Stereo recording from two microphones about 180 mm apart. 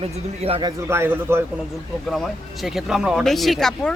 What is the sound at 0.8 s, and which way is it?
Speech, 15° right (ahead or behind).